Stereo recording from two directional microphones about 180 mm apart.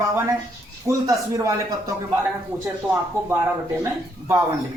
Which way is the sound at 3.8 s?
15° right (ahead or behind).